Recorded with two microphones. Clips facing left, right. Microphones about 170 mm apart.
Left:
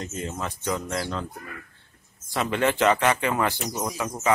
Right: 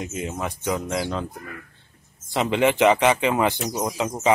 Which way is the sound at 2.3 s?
20° right (ahead or behind).